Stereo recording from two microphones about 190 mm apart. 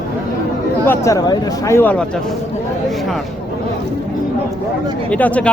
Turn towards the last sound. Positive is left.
turn(degrees=5)  # may be behind; listen again after turning